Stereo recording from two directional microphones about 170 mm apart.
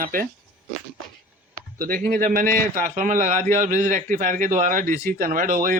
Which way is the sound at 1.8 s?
55° right (ahead or behind).